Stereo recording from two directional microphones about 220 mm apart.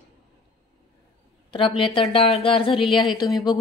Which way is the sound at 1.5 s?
25° left (ahead or behind).